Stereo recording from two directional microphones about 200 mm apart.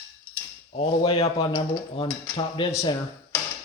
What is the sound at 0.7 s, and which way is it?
Cutlery, 30° left (ahead or behind).